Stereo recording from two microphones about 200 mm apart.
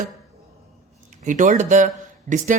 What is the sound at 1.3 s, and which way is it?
Speech, 40° right (ahead or behind).